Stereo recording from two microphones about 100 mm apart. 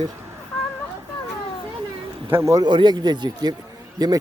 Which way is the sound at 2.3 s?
30° right (ahead or behind).